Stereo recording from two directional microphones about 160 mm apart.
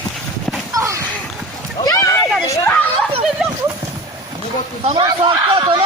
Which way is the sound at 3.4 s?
5° right (ahead or behind).